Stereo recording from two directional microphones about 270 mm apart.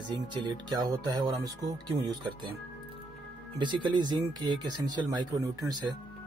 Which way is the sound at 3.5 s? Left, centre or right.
Centre.